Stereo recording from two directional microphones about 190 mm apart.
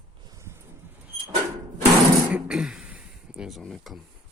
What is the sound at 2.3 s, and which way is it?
Speech, 5° right (ahead or behind).